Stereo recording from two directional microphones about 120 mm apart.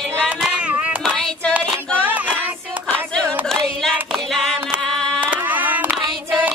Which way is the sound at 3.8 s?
Centre (ahead or behind).